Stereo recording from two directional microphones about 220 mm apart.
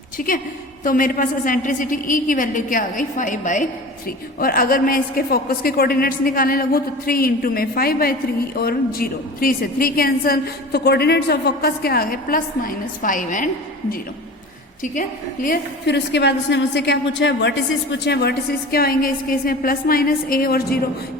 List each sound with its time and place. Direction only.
0.2 s a woman's voice: 40° left (ahead or behind)
15.4 s a woman's voice: 50° left (ahead or behind)